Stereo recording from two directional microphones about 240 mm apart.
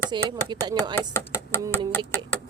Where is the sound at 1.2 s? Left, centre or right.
Centre.